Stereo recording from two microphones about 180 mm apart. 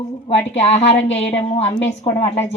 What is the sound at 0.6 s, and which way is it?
Speech, 35° left (ahead or behind).